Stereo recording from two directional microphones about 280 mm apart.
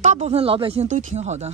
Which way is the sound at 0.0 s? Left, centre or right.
Right.